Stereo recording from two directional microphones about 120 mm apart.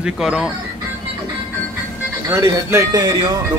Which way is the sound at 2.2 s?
25° right (ahead or behind).